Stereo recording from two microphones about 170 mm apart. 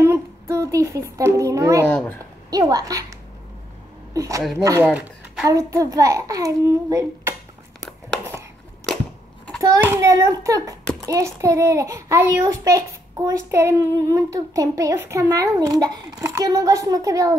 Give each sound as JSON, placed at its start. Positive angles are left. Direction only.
{"t": 0.0, "sound": "a child's voice", "side_deg": -15}
{"t": 1.9, "sound": "speech", "side_deg": 10}
{"t": 2.5, "sound": "a child's voice", "side_deg": -20}
{"t": 4.9, "sound": "a woman's voice", "side_deg": -5}
{"t": 5.5, "sound": "a child's voice", "side_deg": -20}
{"t": 9.6, "sound": "a child's voice", "side_deg": -15}